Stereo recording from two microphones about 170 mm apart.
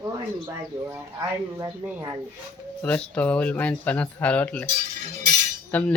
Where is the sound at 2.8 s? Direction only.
10° left (ahead or behind).